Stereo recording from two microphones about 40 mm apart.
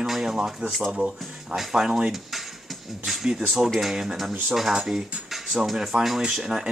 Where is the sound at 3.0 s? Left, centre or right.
Centre.